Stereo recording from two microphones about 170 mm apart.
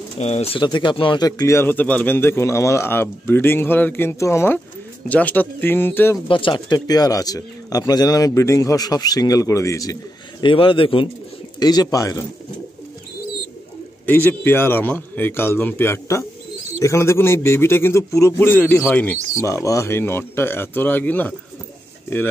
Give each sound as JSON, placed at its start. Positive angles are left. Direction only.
{"t": 0.2, "sound": "speech", "side_deg": 40}
{"t": 6.2, "sound": "speech", "side_deg": 30}
{"t": 10.4, "sound": "a man's voice", "side_deg": 30}
{"t": 14.0, "sound": "speech", "side_deg": 10}